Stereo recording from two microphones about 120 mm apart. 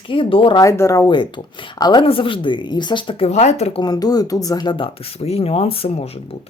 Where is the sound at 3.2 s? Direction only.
65° left (ahead or behind).